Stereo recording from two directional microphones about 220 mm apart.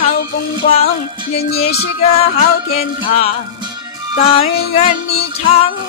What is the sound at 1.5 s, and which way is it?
Speech, 30° left (ahead or behind).